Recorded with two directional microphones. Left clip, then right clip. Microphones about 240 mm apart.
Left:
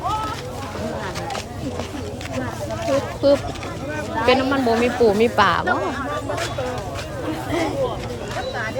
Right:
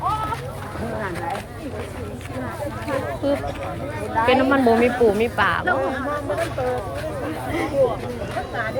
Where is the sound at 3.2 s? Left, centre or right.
Centre.